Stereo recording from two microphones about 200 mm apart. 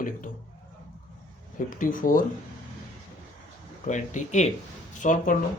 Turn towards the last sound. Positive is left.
turn(degrees=40)  # may be behind; listen again after turning